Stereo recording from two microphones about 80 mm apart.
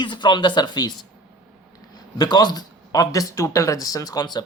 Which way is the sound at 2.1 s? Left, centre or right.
Left.